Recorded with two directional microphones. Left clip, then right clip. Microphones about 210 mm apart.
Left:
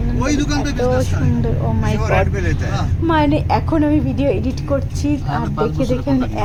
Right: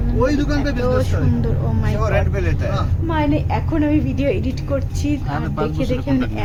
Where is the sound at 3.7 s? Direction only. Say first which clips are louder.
Left 2 dB; 15° left (ahead or behind).